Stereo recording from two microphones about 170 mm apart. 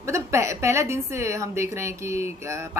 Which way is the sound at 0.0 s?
15° right (ahead or behind).